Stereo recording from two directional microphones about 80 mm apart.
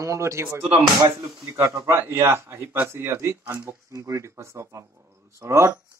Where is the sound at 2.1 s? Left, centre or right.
Right.